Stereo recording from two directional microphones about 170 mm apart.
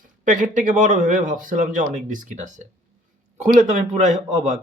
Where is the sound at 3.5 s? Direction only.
45° right (ahead or behind).